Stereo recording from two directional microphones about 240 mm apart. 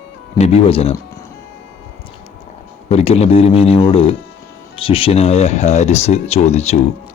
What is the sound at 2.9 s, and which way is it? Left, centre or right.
Speech, left.